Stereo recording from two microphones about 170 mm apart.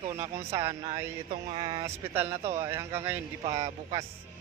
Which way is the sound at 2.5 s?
15° right (ahead or behind).